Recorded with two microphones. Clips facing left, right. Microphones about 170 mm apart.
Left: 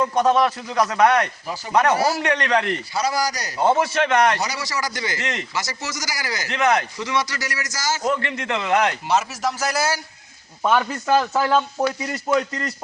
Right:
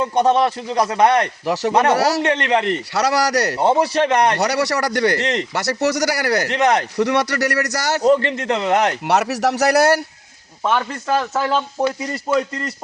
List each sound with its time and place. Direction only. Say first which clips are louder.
0.0 s a man's voice: right 2 dB; 25° right (ahead or behind)
1.5 s speech: right 11 dB; 75° right (ahead or behind)
1.7 s a man's voice: right 1 dB; 30° right (ahead or behind)
2.0 s speech: right 3 dB; 75° right (ahead or behind)
2.2 s a man's voice: right 3 dB; 25° right (ahead or behind)
2.9 s speech: right 6 dB; 75° right (ahead or behind)
3.6 s a man's voice: even; 30° right (ahead or behind)
4.4 s speech: right 8 dB; 70° right (ahead or behind)
6.5 s a man's voice: even; 35° right (ahead or behind)
6.9 s speech: right 7 dB; 65° right (ahead or behind)
8.0 s a man's voice: right 11 dB; 35° right (ahead or behind)
9.0 s speech: right 4 dB; 70° right (ahead or behind)
10.6 s speech: even; 5° left (ahead or behind)